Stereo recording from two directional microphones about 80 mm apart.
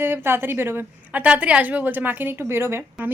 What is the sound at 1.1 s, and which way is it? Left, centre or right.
A woman's voice, centre.